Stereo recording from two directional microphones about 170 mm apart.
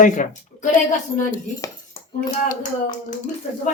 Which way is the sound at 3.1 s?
45° left (ahead or behind).